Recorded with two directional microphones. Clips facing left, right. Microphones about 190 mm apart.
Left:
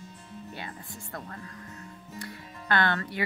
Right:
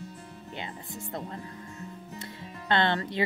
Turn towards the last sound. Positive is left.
turn(degrees=-25)  # may be behind; listen again after turning